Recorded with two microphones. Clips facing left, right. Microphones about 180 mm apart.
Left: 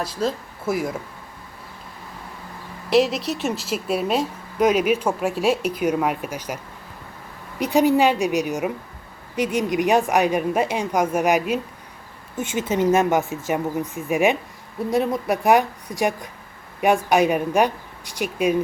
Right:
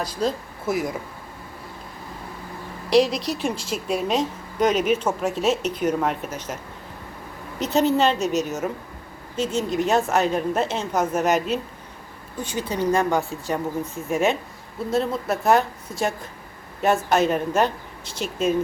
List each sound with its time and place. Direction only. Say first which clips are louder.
0.0 s speech: even; 5° left (ahead or behind)
2.9 s a woman's voice: even; 5° left (ahead or behind)
7.6 s a woman's voice: left 2 dB; 15° left (ahead or behind)